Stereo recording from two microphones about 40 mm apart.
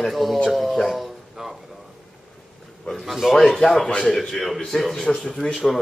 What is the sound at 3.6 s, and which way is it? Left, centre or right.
Speech, centre.